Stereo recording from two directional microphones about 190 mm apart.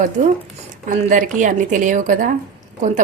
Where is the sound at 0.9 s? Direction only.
45° right (ahead or behind).